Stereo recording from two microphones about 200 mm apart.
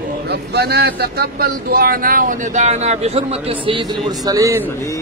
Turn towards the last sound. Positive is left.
turn(degrees=-15)  # may be behind; listen again after turning